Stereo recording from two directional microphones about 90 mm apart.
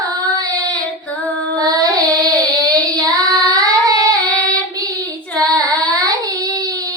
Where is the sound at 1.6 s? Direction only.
45° right (ahead or behind).